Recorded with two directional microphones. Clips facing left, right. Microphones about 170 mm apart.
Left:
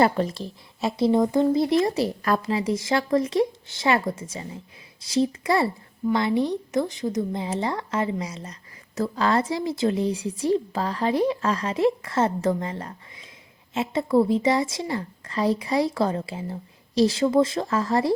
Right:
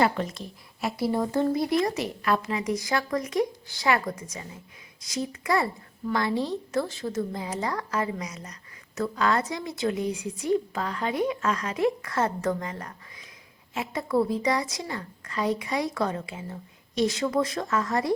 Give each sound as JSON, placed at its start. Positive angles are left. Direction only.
{"t": 0.0, "sound": "a woman's voice", "side_deg": 35}
{"t": 2.2, "sound": "a woman's voice", "side_deg": 35}